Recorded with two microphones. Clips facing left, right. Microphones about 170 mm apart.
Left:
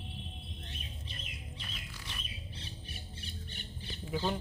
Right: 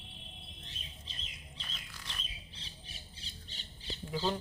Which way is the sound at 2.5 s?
55° left (ahead or behind).